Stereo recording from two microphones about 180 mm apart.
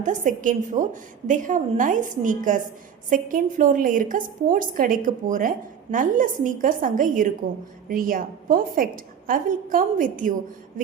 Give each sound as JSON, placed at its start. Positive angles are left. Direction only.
{"t": 0.0, "sound": "a woman's voice", "side_deg": -45}